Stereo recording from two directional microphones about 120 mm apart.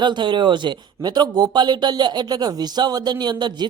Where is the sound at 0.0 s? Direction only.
40° right (ahead or behind).